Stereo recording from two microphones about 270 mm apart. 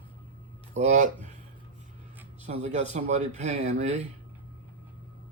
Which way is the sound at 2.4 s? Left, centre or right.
Right.